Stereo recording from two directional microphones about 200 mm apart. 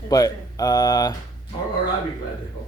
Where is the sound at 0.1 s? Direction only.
20° left (ahead or behind).